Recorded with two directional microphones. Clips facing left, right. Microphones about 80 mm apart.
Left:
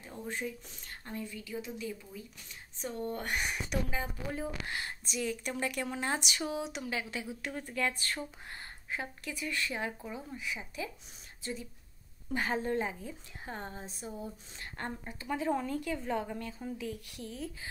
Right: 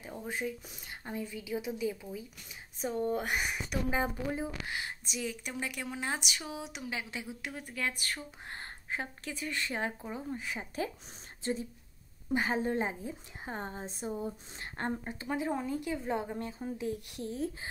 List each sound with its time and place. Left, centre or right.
0.0 s a woman's voice: centre
6.9 s a woman's voice: right
8.5 s speech: right
12.3 s a woman's voice: centre; by 17.6 s right